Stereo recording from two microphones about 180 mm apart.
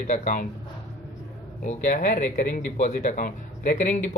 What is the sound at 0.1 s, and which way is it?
Speech, 45° left (ahead or behind).